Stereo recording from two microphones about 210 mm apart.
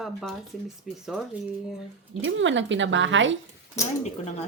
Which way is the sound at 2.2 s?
60° right (ahead or behind).